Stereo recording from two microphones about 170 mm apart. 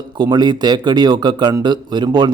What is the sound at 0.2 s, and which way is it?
A man's voice, 25° right (ahead or behind).